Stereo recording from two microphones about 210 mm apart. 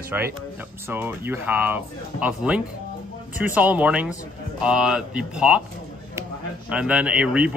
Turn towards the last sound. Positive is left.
turn(degrees=-5)  # may be behind; listen again after turning